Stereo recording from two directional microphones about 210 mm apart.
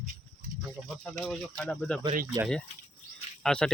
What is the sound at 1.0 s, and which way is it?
Speech, centre (ahead or behind).